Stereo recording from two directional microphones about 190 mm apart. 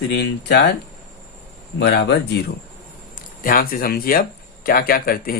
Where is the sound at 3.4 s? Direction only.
50° left (ahead or behind).